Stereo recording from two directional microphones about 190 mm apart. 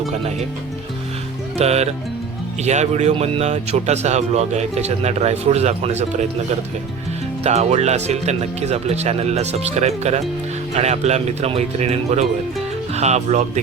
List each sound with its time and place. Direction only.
0.1 s speech: 35° right (ahead or behind)
1.5 s speech: 35° right (ahead or behind)